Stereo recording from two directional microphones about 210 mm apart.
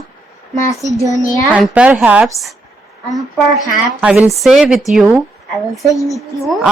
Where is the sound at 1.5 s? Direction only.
5° right (ahead or behind).